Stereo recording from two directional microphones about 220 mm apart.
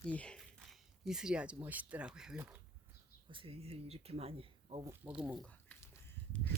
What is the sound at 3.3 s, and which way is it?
Speech, 25° right (ahead or behind).